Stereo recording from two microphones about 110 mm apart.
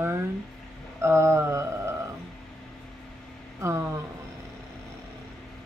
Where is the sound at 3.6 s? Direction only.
25° right (ahead or behind).